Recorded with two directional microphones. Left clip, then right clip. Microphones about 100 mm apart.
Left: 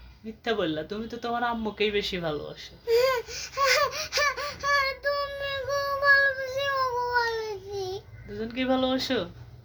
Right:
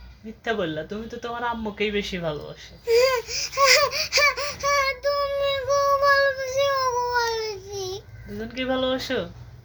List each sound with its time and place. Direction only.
0.4 s speech: 30° left (ahead or behind)
2.8 s a sound: 5° left (ahead or behind)
8.4 s speech: 25° left (ahead or behind)